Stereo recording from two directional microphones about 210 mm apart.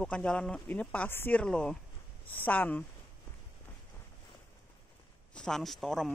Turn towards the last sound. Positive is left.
turn(degrees=0)  # may be behind; listen again after turning